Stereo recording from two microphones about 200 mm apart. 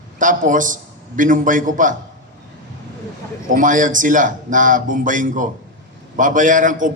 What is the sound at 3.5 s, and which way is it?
A man's voice, 40° right (ahead or behind).